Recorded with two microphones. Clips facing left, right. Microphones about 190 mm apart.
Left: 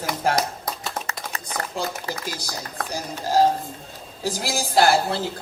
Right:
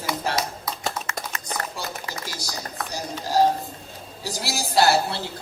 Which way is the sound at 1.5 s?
50° left (ahead or behind).